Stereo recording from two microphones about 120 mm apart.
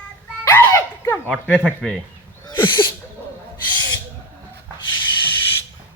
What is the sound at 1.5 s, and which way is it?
Speech, 10° left (ahead or behind).